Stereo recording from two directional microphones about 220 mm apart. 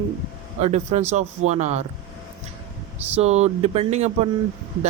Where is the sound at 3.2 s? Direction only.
30° right (ahead or behind).